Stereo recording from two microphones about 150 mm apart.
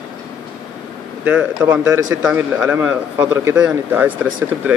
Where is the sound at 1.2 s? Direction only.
15° right (ahead or behind).